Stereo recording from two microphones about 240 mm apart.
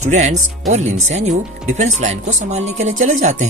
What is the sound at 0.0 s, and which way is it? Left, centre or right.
Speech, right.